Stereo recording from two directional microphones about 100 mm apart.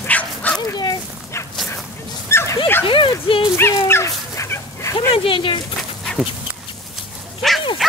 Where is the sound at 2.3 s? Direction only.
30° left (ahead or behind).